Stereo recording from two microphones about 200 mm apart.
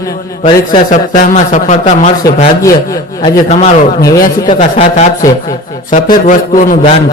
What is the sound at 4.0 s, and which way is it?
Speech, 15° left (ahead or behind).